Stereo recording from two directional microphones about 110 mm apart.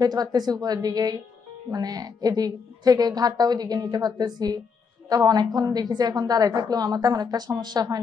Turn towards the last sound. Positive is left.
turn(degrees=-40)  # may be behind; listen again after turning